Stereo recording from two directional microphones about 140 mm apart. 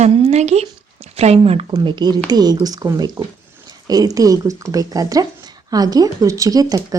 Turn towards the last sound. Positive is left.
turn(degrees=-25)  # may be behind; listen again after turning